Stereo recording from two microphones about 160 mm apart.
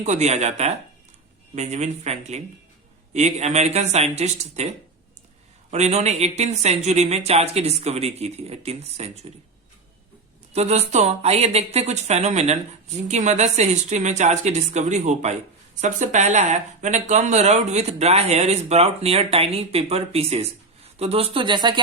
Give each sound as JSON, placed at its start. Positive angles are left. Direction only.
{"t": 0.0, "sound": "speech", "side_deg": -45}
{"t": 5.7, "sound": "speech", "side_deg": -45}
{"t": 10.5, "sound": "speech", "side_deg": -40}